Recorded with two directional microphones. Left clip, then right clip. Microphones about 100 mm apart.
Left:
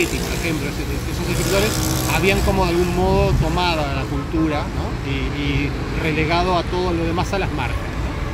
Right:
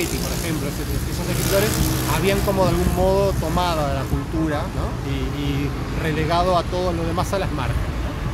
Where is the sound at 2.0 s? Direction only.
35° right (ahead or behind).